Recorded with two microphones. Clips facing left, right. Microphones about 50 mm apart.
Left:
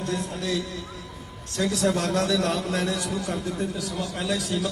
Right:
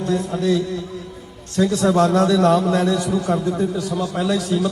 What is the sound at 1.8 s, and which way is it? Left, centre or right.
A man's voice, right.